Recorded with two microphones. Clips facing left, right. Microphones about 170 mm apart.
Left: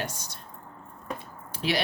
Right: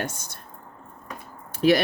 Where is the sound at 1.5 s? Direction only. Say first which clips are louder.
Right 10 dB; 45° right (ahead or behind).